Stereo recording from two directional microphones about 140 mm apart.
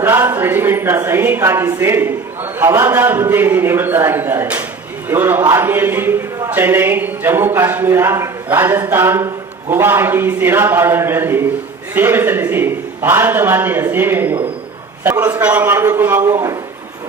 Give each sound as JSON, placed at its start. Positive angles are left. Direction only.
{"t": 0.0, "sound": "a man's voice", "side_deg": -15}
{"t": 16.3, "sound": "a man's voice", "side_deg": -25}